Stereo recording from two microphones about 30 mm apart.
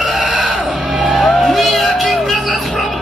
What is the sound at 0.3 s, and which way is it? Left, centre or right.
Music, centre.